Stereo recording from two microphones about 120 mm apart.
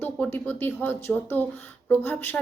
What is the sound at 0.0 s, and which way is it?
Speech, 15° left (ahead or behind).